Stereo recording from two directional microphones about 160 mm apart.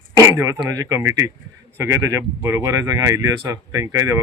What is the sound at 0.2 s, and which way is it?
Speech, 20° right (ahead or behind).